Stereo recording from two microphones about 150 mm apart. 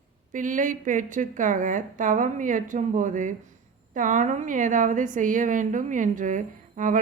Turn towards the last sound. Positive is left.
turn(degrees=-60)  # may be behind; listen again after turning